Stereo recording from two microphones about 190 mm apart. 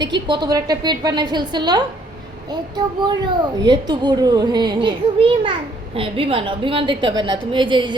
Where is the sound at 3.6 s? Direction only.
20° right (ahead or behind).